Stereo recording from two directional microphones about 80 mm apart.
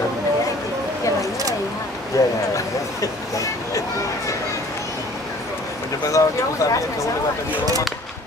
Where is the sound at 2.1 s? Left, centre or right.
Left.